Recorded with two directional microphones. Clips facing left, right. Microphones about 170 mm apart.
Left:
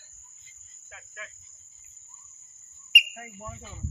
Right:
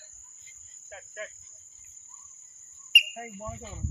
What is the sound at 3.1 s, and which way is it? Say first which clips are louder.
Cricket: right 4 dB; 25° right (ahead or behind).